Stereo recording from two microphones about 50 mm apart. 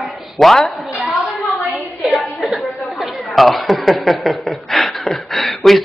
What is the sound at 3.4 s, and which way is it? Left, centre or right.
A man's voice, centre.